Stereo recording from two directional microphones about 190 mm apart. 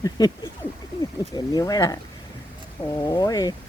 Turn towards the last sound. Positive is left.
turn(degrees=20)  # may be behind; listen again after turning